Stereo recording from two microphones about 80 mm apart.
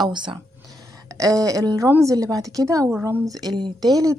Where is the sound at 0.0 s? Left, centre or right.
Right.